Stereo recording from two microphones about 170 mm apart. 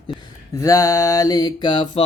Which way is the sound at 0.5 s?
20° left (ahead or behind).